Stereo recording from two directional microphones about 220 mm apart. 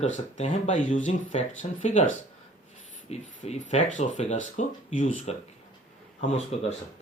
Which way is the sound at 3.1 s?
30° left (ahead or behind).